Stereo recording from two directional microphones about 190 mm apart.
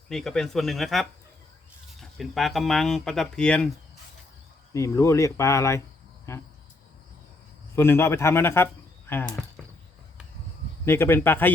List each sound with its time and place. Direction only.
0.1 s speech: centre (ahead or behind)
4.7 s speech: 15° left (ahead or behind)
7.8 s speech: 15° left (ahead or behind)
10.8 s speech: 10° left (ahead or behind)